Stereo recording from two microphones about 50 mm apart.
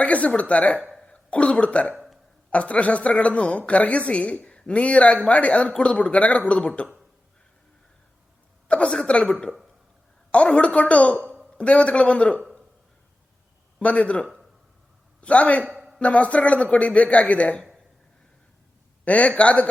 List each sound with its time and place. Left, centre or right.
0.0 s a man's voice: left
8.6 s a man's voice: left
13.7 s a man's voice: left
19.0 s a man's voice: left